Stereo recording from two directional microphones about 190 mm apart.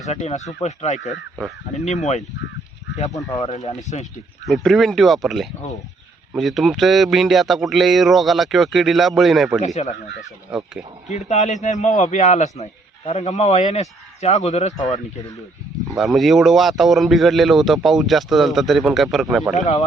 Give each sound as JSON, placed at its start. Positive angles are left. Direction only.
{"t": 0.1, "sound": "a man's voice", "side_deg": 35}
{"t": 3.3, "sound": "a man's voice", "side_deg": 35}
{"t": 4.4, "sound": "a man's voice", "side_deg": 0}
{"t": 9.6, "sound": "a man's voice", "side_deg": 35}
{"t": 11.1, "sound": "a man's voice", "side_deg": 35}
{"t": 16.0, "sound": "a man's voice", "side_deg": 0}
{"t": 19.5, "sound": "a man's voice", "side_deg": 35}